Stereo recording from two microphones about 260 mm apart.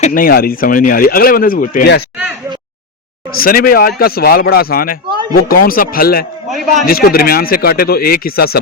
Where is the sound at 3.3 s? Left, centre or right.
Left.